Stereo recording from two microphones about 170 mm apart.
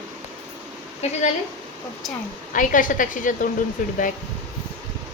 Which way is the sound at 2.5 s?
50° left (ahead or behind).